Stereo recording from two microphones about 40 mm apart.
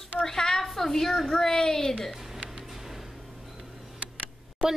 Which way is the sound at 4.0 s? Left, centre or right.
Right.